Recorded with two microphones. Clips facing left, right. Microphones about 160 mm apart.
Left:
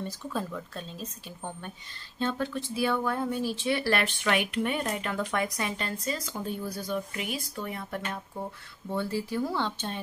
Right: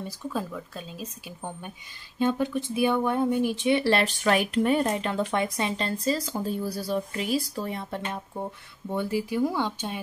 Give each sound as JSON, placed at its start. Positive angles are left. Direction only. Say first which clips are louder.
{"t": 0.0, "sound": "speech", "louder": "right 2 dB", "side_deg": -5}
{"t": 4.0, "sound": "speech", "louder": "right 4 dB", "side_deg": -40}